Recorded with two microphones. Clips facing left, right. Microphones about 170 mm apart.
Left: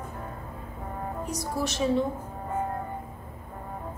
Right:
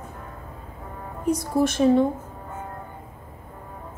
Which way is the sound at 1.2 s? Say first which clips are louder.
Right 11 dB; 55° right (ahead or behind).